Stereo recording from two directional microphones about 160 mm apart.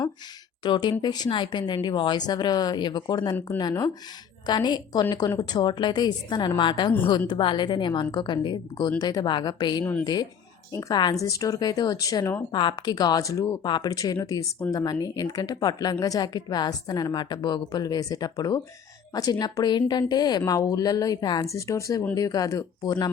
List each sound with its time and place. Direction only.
0.6 s a woman's voice: 30° left (ahead or behind)
12.5 s a woman's voice: 30° left (ahead or behind)